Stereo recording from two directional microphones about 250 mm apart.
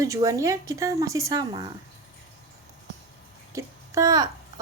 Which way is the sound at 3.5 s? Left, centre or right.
Centre.